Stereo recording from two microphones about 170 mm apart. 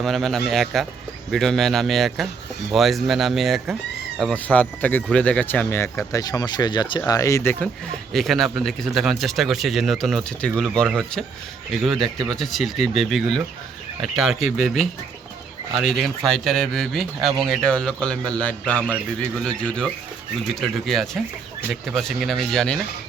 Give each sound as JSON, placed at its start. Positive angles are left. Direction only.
{"t": 0.0, "sound": "speech", "side_deg": 0}
{"t": 8.1, "sound": "speech", "side_deg": 0}